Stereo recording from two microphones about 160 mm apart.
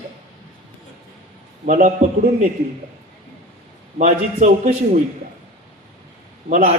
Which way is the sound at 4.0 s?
55° right (ahead or behind).